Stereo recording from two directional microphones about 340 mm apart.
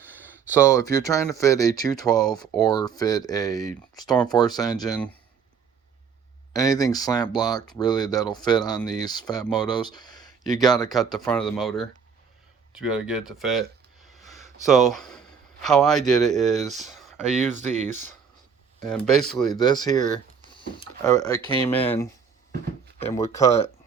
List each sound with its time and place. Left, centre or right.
0.8 s speech: centre
6.5 s speech: centre
14.2 s a sound: centre
15.6 s speech: centre
16.9 s a sound: centre
17.5 s speech: right
19.3 s speech: centre
19.5 s speech: centre
21.1 s speech: centre
21.4 s speech: centre